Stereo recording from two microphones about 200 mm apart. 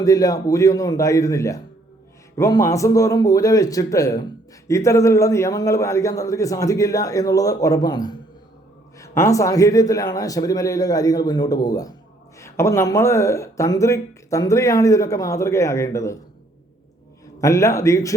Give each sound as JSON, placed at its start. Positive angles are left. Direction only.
{"t": 0.0, "sound": "speech", "side_deg": 15}
{"t": 17.4, "sound": "speech", "side_deg": 15}